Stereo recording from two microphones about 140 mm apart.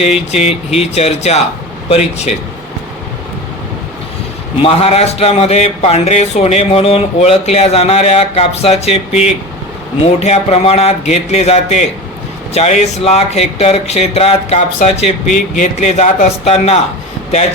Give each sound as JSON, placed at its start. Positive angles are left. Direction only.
{"t": 0.3, "sound": "a man's voice", "side_deg": 50}
{"t": 4.6, "sound": "a man's voice", "side_deg": 45}